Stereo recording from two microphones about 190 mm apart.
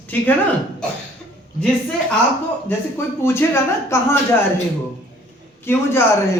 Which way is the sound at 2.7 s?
10° left (ahead or behind).